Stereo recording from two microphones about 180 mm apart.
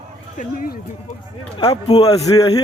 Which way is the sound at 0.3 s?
50° left (ahead or behind).